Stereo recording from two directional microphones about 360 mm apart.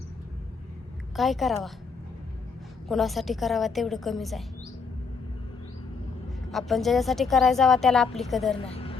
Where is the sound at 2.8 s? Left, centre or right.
Centre.